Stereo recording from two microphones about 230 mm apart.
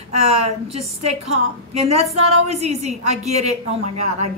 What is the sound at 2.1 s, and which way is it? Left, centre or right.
A woman's voice, right.